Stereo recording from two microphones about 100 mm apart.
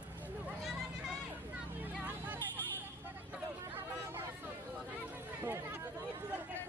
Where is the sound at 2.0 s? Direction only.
20° right (ahead or behind).